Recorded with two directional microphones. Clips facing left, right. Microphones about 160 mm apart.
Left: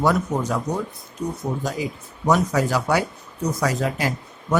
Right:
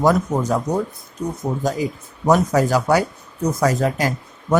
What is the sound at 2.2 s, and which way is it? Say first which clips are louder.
Speech: right 4 dB; 45° right (ahead or behind).